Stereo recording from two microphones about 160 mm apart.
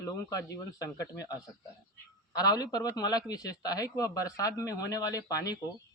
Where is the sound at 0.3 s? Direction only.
20° left (ahead or behind).